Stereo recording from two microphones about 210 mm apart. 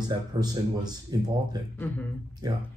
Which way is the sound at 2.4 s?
20° right (ahead or behind).